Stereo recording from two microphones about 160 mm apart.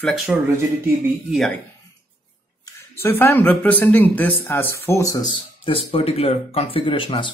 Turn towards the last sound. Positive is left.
turn(degrees=30)  # may be behind; listen again after turning